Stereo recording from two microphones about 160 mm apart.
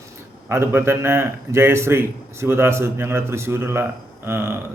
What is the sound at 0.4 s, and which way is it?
A man's voice, 15° right (ahead or behind).